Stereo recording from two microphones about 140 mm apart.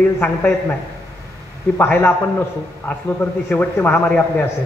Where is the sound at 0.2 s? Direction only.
15° left (ahead or behind).